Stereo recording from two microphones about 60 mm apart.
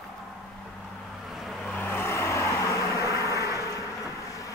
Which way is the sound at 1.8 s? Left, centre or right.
Left.